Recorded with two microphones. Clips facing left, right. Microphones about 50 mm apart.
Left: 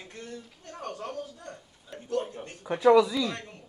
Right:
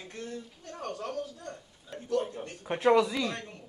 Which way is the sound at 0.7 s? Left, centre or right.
Left.